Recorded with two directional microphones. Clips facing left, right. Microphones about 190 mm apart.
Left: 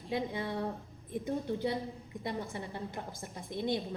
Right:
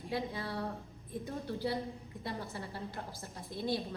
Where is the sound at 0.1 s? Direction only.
20° left (ahead or behind).